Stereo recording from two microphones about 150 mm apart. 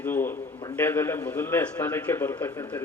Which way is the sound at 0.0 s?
15° left (ahead or behind).